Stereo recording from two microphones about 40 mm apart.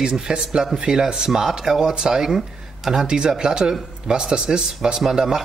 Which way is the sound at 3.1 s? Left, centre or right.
Right.